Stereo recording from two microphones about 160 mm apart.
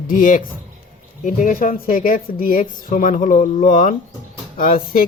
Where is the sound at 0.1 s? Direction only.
55° left (ahead or behind).